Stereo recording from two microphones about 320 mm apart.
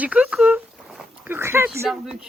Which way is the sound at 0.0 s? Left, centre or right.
Centre.